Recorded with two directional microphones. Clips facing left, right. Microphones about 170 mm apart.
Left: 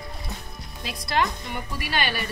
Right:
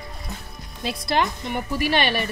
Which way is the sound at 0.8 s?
25° right (ahead or behind).